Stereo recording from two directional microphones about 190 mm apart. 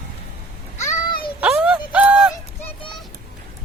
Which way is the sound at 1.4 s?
5° right (ahead or behind).